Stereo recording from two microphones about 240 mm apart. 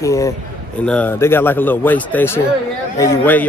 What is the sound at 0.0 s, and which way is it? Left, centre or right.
A man's voice, centre.